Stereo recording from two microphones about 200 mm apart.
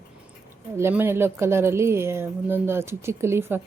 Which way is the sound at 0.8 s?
10° right (ahead or behind).